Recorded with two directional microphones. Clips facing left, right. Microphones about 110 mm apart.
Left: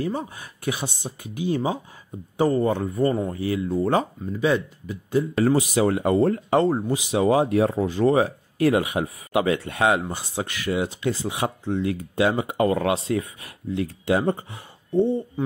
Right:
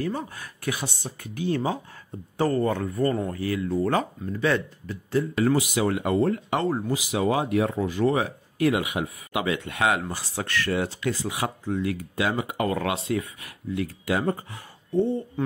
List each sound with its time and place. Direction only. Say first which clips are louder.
0.0 s speech: left 2 dB; 20° left (ahead or behind)
5.3 s speech: left 3 dB; 35° left (ahead or behind)
10.0 s speech: left 2 dB; 20° left (ahead or behind)